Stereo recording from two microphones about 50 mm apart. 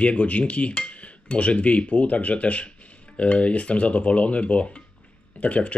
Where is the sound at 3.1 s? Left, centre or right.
Left.